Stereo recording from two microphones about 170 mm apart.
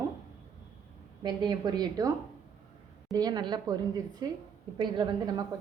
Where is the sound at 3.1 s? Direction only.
20° right (ahead or behind).